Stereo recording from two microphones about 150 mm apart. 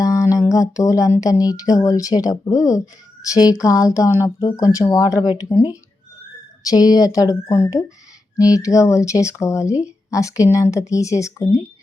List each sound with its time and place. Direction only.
0.0 s speech: 25° left (ahead or behind)